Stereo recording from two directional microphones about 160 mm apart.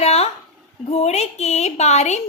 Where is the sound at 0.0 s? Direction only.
40° left (ahead or behind).